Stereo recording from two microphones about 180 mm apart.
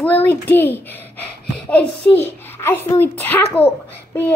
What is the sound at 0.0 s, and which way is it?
A child's voice, 10° left (ahead or behind).